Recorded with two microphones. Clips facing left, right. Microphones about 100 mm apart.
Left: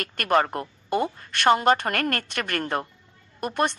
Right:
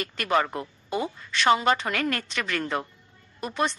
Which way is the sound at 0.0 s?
55° left (ahead or behind).